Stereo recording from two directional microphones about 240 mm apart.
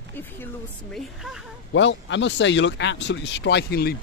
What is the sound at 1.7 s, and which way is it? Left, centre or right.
Speech, left.